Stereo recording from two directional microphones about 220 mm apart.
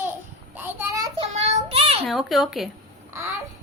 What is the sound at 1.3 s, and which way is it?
Child singing, 30° right (ahead or behind).